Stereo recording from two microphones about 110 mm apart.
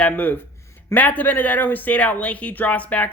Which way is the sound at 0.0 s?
15° left (ahead or behind).